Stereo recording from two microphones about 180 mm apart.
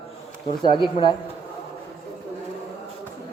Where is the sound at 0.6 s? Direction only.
25° left (ahead or behind).